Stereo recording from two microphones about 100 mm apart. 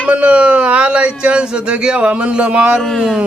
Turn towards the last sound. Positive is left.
turn(degrees=5)  # may be behind; listen again after turning